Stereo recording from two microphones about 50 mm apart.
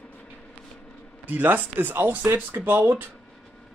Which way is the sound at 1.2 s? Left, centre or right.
Right.